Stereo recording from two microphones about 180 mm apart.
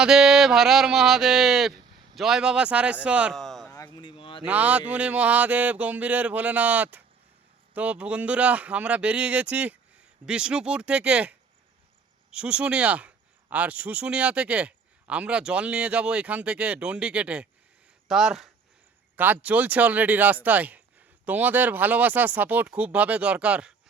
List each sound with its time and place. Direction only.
0.0 s speech: 5° right (ahead or behind)
3.7 s a sound: 20° left (ahead or behind)
4.4 s speech: 10° right (ahead or behind)